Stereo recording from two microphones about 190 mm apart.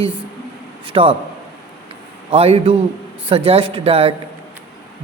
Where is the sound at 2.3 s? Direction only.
30° right (ahead or behind).